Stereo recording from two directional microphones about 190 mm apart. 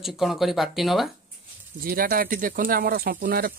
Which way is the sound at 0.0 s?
Centre (ahead or behind).